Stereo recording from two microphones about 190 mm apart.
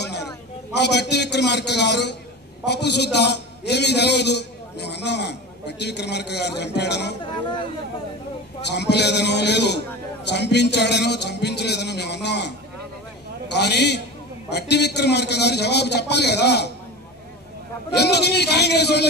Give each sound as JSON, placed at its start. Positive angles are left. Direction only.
{"t": 0.0, "sound": "a sound", "side_deg": 60}
{"t": 0.7, "sound": "a man's voice", "side_deg": 65}
{"t": 7.2, "sound": "speech", "side_deg": 25}
{"t": 8.6, "sound": "a man's voice", "side_deg": 65}
{"t": 17.9, "sound": "a man's voice", "side_deg": 60}